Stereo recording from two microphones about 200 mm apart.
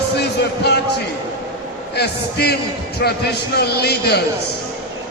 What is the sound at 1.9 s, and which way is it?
A man's voice, 55° left (ahead or behind).